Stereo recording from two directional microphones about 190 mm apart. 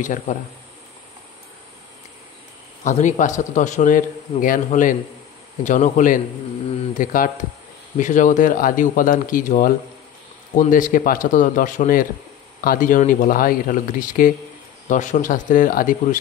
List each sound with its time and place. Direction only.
0.0 s a man's voice: 40° left (ahead or behind)
2.8 s a man's voice: 40° left (ahead or behind)